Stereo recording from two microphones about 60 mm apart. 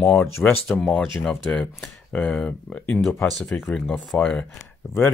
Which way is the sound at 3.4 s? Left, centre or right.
Left.